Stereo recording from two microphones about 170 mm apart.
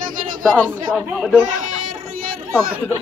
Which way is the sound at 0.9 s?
Centre (ahead or behind).